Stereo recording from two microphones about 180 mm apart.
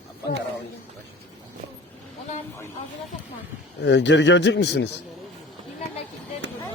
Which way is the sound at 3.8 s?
75° left (ahead or behind).